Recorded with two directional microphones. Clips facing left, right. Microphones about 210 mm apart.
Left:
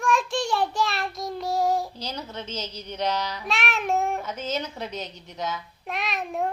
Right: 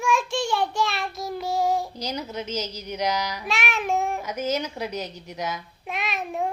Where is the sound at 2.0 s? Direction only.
15° right (ahead or behind).